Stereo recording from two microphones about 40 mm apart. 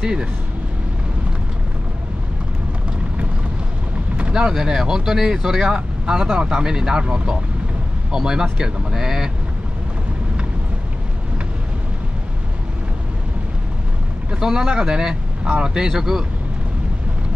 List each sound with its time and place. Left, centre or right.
0.0 s speech: right
4.3 s speech: centre
14.4 s speech: centre
15.9 s speech: centre